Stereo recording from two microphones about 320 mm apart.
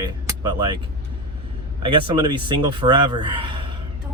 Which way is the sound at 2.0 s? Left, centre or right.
Centre.